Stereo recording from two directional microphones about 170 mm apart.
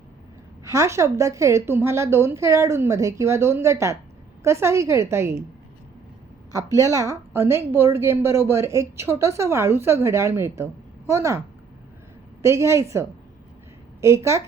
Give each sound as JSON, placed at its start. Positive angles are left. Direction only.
{"t": 0.6, "sound": "a woman's voice", "side_deg": -20}
{"t": 6.5, "sound": "a woman's voice", "side_deg": -20}
{"t": 12.4, "sound": "a woman's voice", "side_deg": -15}